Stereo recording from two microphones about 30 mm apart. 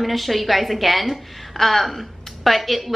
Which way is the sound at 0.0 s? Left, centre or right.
Centre.